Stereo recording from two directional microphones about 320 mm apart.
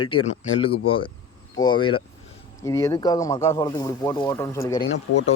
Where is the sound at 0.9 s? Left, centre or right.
Centre.